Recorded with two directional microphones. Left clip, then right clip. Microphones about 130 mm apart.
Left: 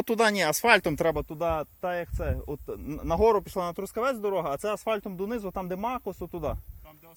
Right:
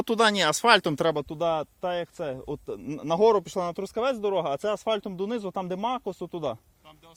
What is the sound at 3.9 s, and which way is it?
Speech, 45° right (ahead or behind).